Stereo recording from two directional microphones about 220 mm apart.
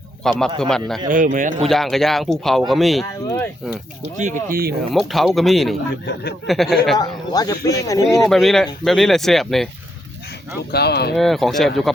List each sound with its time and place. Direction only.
0.2 s speech: centre (ahead or behind)
1.0 s speech: 35° right (ahead or behind)
1.6 s speech: centre (ahead or behind)
4.2 s speech: 35° right (ahead or behind)
4.8 s speech: centre (ahead or behind)
7.0 s speech: 15° left (ahead or behind)
8.3 s speech: centre (ahead or behind)
10.7 s speech: 45° left (ahead or behind)
11.2 s speech: centre (ahead or behind)